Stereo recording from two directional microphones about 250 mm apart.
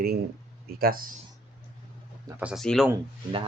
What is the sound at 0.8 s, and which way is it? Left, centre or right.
Speech, right.